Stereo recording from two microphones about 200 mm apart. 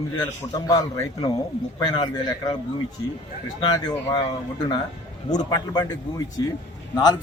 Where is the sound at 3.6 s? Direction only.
20° left (ahead or behind).